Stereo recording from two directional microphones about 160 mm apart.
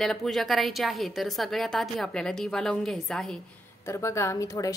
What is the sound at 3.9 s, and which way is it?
Speech, 15° left (ahead or behind).